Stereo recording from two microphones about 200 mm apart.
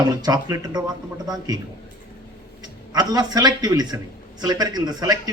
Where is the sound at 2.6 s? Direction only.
20° right (ahead or behind).